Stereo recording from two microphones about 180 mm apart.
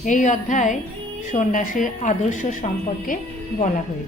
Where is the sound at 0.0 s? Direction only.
40° left (ahead or behind).